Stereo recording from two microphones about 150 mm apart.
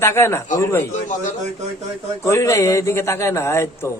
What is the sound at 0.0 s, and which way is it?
Speech, 15° left (ahead or behind).